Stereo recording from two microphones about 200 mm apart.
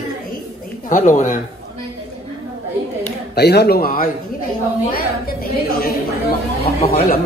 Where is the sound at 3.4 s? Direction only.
55° left (ahead or behind).